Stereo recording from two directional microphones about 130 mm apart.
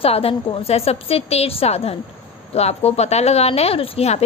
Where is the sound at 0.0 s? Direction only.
45° left (ahead or behind).